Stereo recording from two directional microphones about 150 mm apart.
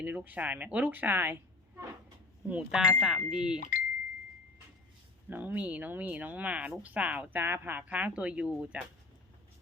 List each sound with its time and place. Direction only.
0.0 s a woman's voice: 10° right (ahead or behind)
3.6 s speech: 65° left (ahead or behind)
5.3 s speech: 10° right (ahead or behind)